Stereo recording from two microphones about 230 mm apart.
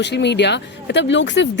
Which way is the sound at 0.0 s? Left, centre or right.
Left.